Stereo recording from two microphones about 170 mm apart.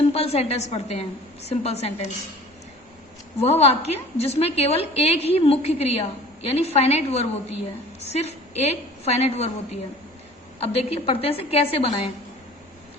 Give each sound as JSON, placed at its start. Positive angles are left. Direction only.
{"t": 0.0, "sound": "a woman's voice", "side_deg": 35}
{"t": 3.3, "sound": "a woman's voice", "side_deg": 35}
{"t": 10.6, "sound": "a woman's voice", "side_deg": 35}